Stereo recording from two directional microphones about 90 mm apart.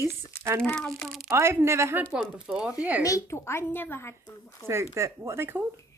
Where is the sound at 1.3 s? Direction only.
30° right (ahead or behind).